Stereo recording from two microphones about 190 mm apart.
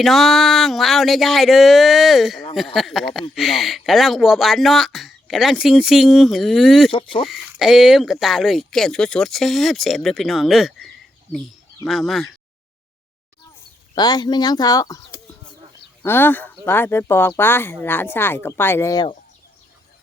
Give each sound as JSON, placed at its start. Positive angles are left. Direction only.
{"t": 0.0, "sound": "speech", "side_deg": 0}
{"t": 6.9, "sound": "speech", "side_deg": 30}
{"t": 7.3, "sound": "speech", "side_deg": 0}
{"t": 10.7, "sound": "bird", "side_deg": 0}
{"t": 11.9, "sound": "speech", "side_deg": 0}
{"t": 13.9, "sound": "speech", "side_deg": 20}
{"t": 16.0, "sound": "speech", "side_deg": 10}